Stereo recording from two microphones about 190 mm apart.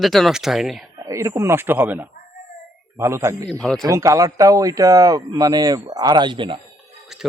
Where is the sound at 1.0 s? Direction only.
15° right (ahead or behind).